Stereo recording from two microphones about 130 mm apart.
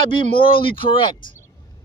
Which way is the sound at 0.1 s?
40° left (ahead or behind).